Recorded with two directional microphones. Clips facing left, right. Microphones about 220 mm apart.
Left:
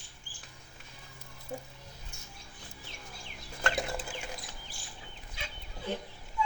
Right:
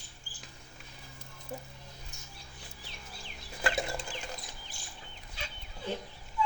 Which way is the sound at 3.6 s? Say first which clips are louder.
Even; centre (ahead or behind).